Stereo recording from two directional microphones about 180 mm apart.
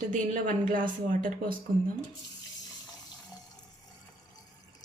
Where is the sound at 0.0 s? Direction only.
45° right (ahead or behind).